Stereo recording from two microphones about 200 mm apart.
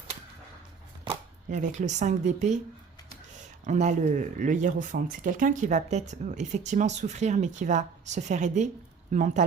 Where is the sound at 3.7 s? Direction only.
35° right (ahead or behind).